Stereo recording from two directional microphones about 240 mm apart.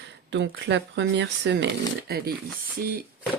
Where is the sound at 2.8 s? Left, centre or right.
Right.